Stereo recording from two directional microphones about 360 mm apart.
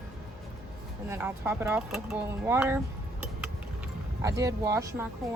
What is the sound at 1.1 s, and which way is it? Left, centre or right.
Speech, centre.